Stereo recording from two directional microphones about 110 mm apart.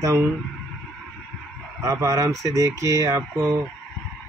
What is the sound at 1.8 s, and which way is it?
Speech, 30° right (ahead or behind).